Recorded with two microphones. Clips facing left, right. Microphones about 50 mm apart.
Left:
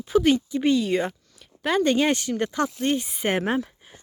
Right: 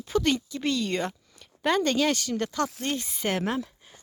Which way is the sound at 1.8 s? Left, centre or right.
Left.